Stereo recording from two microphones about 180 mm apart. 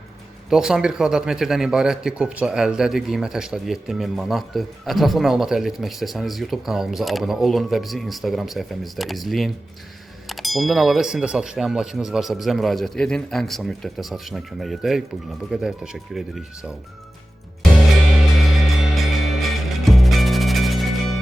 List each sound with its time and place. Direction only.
0.5 s a man's voice: 5° right (ahead or behind)
18.9 s music: centre (ahead or behind)